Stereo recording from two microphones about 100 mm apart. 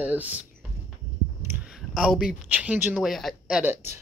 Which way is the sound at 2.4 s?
15° right (ahead or behind).